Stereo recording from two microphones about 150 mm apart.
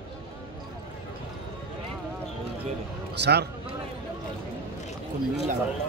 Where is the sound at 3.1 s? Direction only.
90° right.